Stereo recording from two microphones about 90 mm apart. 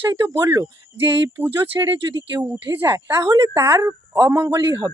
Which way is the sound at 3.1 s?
45° right (ahead or behind).